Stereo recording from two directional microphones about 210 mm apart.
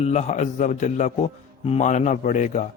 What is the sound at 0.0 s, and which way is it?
A man's voice, 30° left (ahead or behind).